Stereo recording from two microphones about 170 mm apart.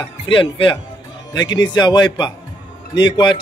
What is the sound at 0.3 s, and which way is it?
Speech, 30° left (ahead or behind).